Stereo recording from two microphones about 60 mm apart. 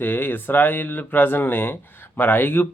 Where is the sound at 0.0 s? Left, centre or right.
Left.